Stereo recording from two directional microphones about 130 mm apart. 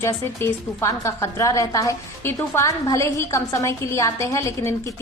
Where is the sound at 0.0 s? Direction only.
20° left (ahead or behind).